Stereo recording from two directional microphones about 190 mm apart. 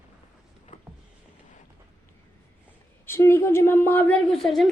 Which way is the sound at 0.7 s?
40° left (ahead or behind).